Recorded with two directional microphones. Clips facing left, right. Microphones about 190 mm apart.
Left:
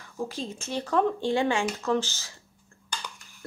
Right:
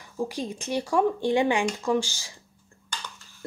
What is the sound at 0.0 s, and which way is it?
Speech, 15° right (ahead or behind).